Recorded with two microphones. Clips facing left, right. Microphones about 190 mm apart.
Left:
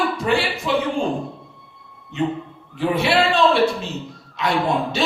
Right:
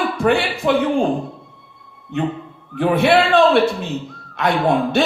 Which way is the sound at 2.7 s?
55° right (ahead or behind).